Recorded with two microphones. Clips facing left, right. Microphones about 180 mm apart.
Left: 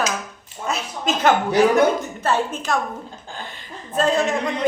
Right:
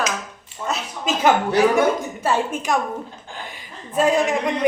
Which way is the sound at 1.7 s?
10° right (ahead or behind).